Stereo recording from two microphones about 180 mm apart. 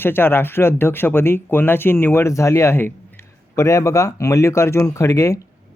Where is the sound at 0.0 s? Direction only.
10° left (ahead or behind).